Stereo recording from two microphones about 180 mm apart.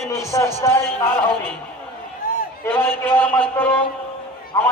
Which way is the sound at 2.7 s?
10° left (ahead or behind).